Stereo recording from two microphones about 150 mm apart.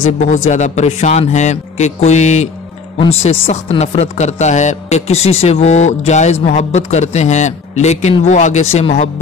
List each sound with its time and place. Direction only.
0.2 s speech: 50° left (ahead or behind)